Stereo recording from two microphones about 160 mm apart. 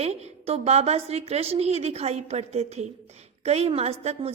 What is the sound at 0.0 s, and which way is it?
A woman's voice, 45° right (ahead or behind).